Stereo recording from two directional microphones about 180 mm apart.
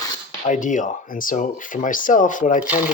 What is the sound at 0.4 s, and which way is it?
Speech, 45° left (ahead or behind).